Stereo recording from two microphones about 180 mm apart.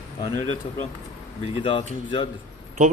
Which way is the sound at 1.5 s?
30° left (ahead or behind).